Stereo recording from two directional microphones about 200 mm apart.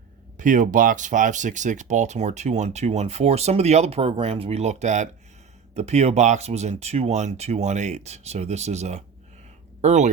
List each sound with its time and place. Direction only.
0.3 s speech: 40° right (ahead or behind)